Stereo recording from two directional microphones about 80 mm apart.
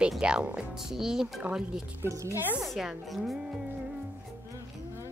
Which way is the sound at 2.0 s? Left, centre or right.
Right.